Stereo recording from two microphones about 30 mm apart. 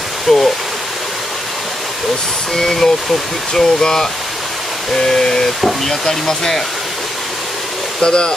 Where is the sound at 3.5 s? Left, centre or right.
Centre.